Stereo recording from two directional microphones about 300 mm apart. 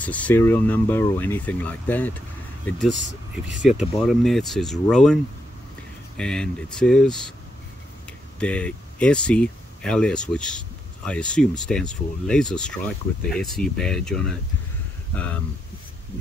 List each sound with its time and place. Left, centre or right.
0.0 s speech: centre
2.9 s speech: right
3.6 s speech: centre
8.4 s speech: centre